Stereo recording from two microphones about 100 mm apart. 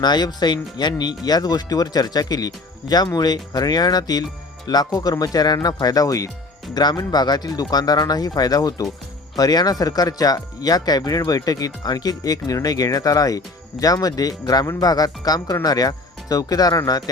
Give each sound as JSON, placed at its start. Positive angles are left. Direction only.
{"t": 0.0, "sound": "speech", "side_deg": 45}